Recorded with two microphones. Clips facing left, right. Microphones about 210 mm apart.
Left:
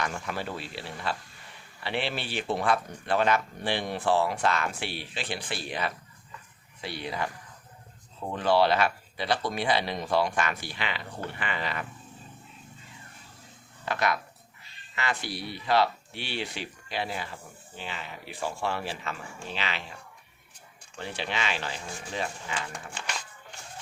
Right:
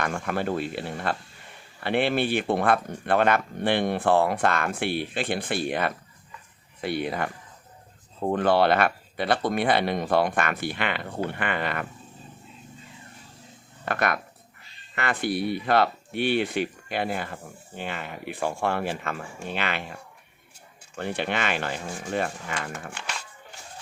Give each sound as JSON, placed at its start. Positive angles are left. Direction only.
{"t": 0.0, "sound": "speech", "side_deg": -55}
{"t": 13.8, "sound": "speech", "side_deg": -55}
{"t": 21.0, "sound": "speech", "side_deg": -55}